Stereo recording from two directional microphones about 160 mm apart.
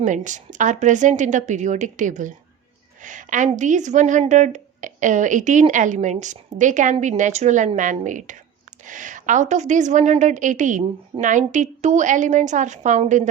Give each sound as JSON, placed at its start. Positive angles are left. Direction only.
{"t": 0.0, "sound": "a woman's voice", "side_deg": -50}